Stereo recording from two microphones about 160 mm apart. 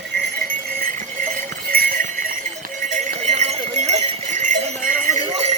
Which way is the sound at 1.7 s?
65° right (ahead or behind).